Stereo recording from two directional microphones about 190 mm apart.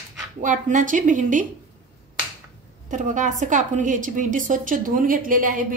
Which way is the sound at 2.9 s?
40° right (ahead or behind).